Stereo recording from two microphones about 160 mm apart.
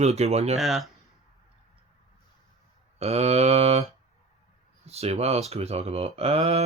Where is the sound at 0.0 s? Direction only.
45° right (ahead or behind).